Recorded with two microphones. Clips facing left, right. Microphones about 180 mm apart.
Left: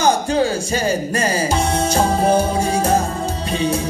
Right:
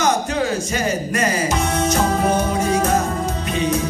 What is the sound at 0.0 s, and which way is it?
Music, 30° left (ahead or behind).